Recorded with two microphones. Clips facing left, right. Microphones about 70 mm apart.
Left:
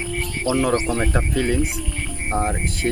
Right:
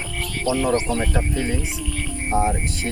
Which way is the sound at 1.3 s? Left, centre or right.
Left.